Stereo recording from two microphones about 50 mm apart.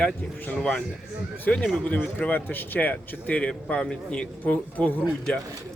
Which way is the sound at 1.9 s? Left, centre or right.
Left.